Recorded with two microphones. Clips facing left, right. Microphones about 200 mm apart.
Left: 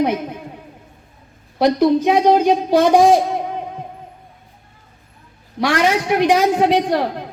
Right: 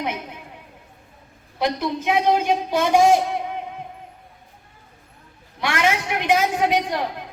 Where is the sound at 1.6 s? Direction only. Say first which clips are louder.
Left 9 dB; 50° left (ahead or behind).